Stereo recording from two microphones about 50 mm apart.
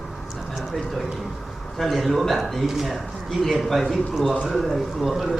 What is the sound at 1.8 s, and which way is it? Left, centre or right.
A man's voice, centre.